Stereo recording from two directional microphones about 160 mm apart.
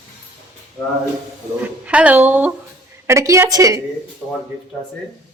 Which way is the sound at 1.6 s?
10° right (ahead or behind).